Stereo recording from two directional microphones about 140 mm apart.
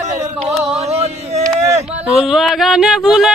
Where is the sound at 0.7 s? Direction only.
50° right (ahead or behind).